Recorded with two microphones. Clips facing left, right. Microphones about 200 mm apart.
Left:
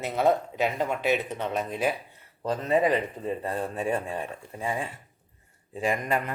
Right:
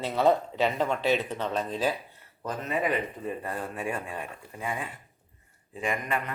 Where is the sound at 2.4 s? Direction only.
30° left (ahead or behind).